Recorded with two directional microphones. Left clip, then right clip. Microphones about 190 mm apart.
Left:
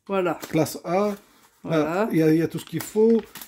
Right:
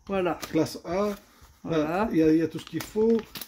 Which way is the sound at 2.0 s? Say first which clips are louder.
Left 2 dB; 55° left (ahead or behind).